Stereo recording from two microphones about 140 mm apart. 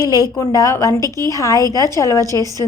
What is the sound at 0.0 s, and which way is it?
Speech, 20° right (ahead or behind).